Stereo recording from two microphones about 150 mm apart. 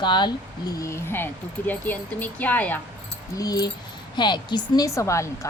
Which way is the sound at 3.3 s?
25° left (ahead or behind).